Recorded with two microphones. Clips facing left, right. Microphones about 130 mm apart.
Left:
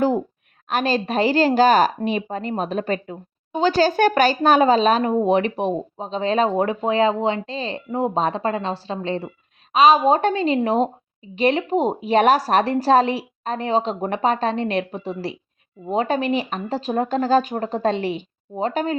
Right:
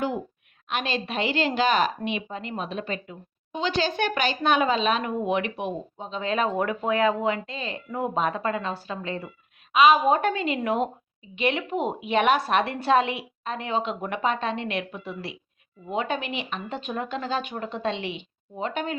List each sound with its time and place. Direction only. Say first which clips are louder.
0.7 s a woman's voice: left 7 dB; 40° left (ahead or behind)